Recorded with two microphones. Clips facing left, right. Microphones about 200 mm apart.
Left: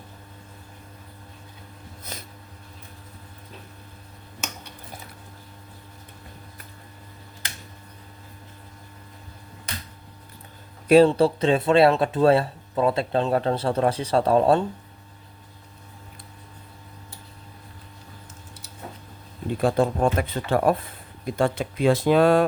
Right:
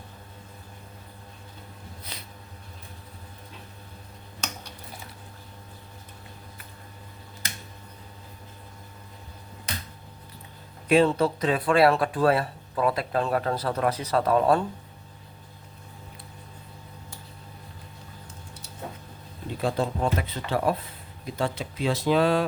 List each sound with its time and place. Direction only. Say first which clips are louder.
2.1 s snort: left 6 dB; 45° left (ahead or behind)
10.8 s speech: left 5 dB; 35° left (ahead or behind)
19.6 s speech: left 5 dB; 50° left (ahead or behind)